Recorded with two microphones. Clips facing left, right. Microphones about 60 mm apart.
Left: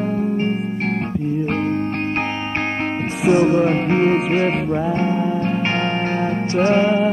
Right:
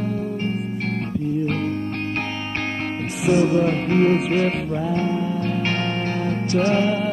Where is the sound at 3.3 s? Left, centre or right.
Left.